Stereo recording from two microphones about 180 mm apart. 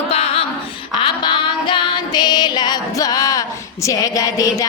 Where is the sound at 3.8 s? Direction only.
20° left (ahead or behind).